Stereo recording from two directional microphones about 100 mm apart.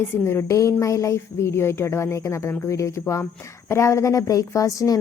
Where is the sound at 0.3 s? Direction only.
30° left (ahead or behind).